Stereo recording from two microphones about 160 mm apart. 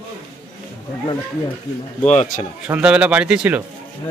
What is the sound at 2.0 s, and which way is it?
Speech, 45° left (ahead or behind).